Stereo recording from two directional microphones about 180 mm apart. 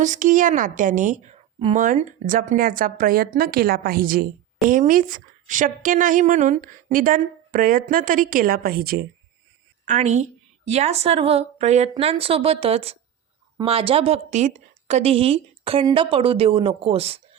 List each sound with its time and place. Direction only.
0.0 s a woman's voice: 45° right (ahead or behind)
9.8 s a woman's voice: 40° right (ahead or behind)